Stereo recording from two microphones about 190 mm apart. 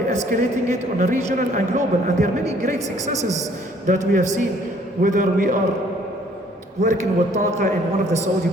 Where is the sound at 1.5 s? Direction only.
40° right (ahead or behind).